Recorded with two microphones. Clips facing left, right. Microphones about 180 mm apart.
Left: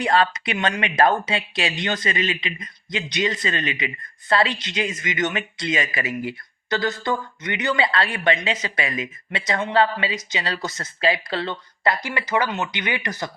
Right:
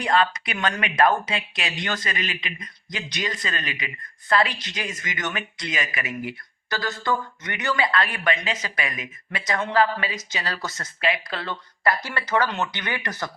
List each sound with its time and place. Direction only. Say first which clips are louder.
0.0 s speech: left 2 dB; 30° left (ahead or behind)
11.0 s speech: left 4 dB; 30° left (ahead or behind)